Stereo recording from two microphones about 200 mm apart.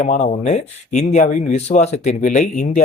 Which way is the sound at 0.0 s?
40° left (ahead or behind).